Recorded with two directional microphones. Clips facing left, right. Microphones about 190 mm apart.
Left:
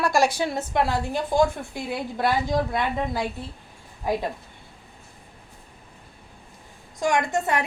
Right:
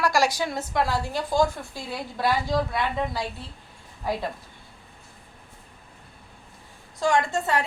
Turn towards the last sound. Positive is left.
turn(degrees=20)  # may be behind; listen again after turning